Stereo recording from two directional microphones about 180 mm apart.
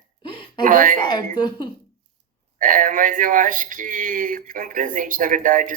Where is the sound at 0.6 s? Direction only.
50° right (ahead or behind).